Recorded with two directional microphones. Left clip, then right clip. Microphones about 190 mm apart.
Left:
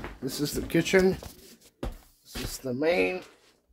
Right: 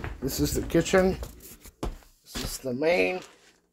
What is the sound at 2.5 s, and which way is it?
Speech, centre (ahead or behind).